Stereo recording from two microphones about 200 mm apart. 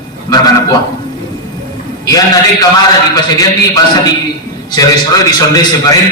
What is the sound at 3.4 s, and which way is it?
A man's voice, 15° left (ahead or behind).